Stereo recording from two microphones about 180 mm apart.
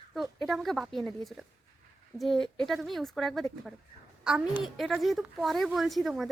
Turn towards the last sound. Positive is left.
turn(degrees=0)  # may be behind; listen again after turning